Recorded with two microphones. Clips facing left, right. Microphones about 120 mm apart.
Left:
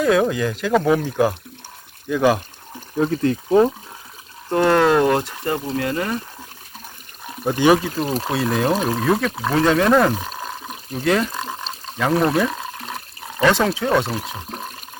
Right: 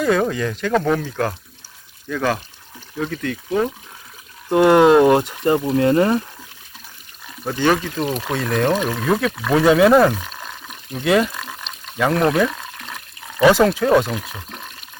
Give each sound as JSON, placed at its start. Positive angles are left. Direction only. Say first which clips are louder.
{"t": 0.0, "sound": "speech", "louder": "left 1 dB", "side_deg": 0}
{"t": 3.0, "sound": "speech", "louder": "left 6 dB", "side_deg": 35}
{"t": 4.5, "sound": "speech", "louder": "right 4 dB", "side_deg": -15}
{"t": 7.6, "sound": "speech", "louder": "left 2 dB", "side_deg": 10}
{"t": 8.0, "sound": "speech", "louder": "even", "side_deg": 35}
{"t": 8.3, "sound": "speech", "louder": "right 1 dB", "side_deg": 5}
{"t": 10.2, "sound": "water", "louder": "left 4 dB", "side_deg": 35}
{"t": 11.0, "sound": "speech", "louder": "right 2 dB", "side_deg": 0}
{"t": 11.3, "sound": "frog", "louder": "left 4 dB", "side_deg": 35}
{"t": 11.9, "sound": "speech", "louder": "right 1 dB", "side_deg": 0}
{"t": 12.5, "sound": "water", "louder": "left 3 dB", "side_deg": 35}
{"t": 13.4, "sound": "speech", "louder": "right 4 dB", "side_deg": -5}
{"t": 14.5, "sound": "toilet flush", "louder": "left 4 dB", "side_deg": 35}